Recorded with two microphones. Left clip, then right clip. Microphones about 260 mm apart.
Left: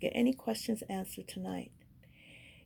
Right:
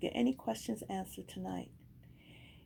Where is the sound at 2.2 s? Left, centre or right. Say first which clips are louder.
Left 4 dB; left.